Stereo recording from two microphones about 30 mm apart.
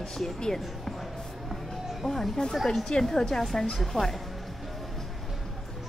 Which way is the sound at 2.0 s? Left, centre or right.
Centre.